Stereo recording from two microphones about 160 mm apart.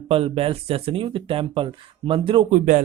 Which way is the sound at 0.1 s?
35° right (ahead or behind).